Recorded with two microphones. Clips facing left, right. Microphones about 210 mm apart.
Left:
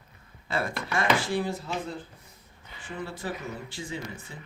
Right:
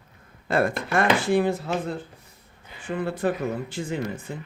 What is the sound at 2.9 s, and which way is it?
Speech, 60° right (ahead or behind).